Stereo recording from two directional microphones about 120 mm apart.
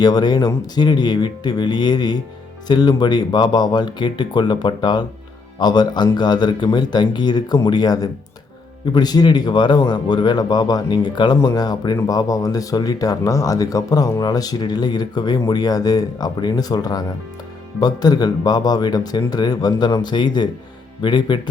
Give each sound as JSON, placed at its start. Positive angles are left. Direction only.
{"t": 0.0, "sound": "speech", "side_deg": 35}